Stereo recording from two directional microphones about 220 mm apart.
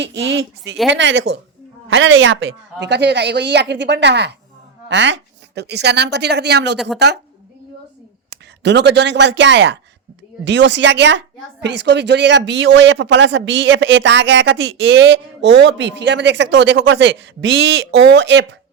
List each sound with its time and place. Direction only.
0.0 s a woman's voice: 55° right (ahead or behind)
8.3 s a woman's voice: 50° right (ahead or behind)